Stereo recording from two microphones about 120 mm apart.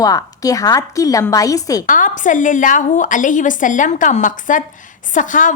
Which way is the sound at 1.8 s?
90° left.